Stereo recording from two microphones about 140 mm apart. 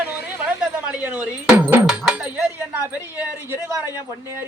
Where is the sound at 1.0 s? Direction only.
10° right (ahead or behind).